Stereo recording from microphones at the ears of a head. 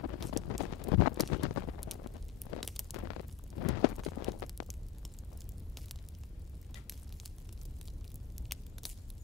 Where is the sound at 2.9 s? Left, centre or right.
Left.